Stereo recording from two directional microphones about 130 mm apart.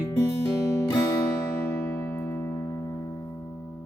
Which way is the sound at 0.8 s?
30° left (ahead or behind).